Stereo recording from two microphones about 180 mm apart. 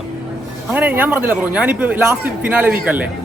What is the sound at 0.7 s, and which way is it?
A man's voice, 10° right (ahead or behind).